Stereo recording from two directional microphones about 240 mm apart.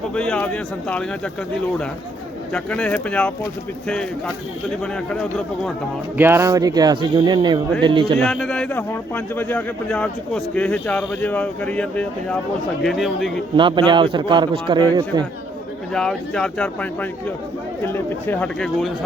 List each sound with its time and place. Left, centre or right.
0.1 s speech: centre
2.5 s speech: centre
5.1 s speech: centre
6.1 s speech: centre
8.2 s speech: centre
13.6 s a man's voice: centre
15.9 s speech: centre